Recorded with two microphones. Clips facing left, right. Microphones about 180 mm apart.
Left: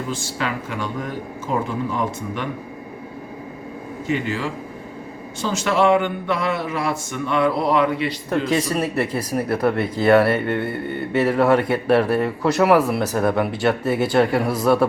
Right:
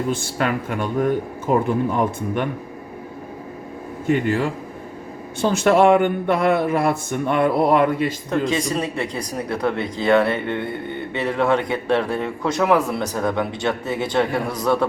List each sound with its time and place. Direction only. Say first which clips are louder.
0.1 s a man's voice: right 4 dB; 55° right (ahead or behind)
4.0 s a man's voice: right 4 dB; 55° right (ahead or behind)
8.6 s speech: left 2 dB; 5° left (ahead or behind)